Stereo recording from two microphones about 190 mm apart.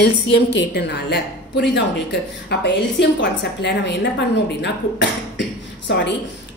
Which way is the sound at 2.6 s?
65° left (ahead or behind).